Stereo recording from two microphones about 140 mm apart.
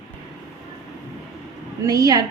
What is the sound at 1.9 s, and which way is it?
Speech, 25° right (ahead or behind).